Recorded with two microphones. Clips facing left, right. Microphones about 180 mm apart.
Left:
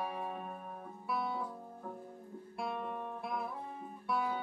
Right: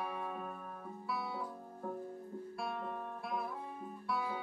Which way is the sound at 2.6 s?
20° left (ahead or behind).